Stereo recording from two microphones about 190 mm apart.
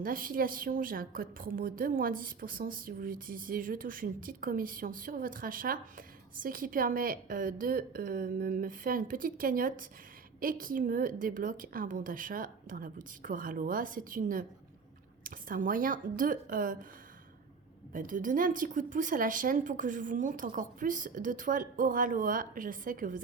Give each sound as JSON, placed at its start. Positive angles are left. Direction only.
{"t": 0.0, "sound": "a woman's voice", "side_deg": -45}
{"t": 17.9, "sound": "a woman's voice", "side_deg": -45}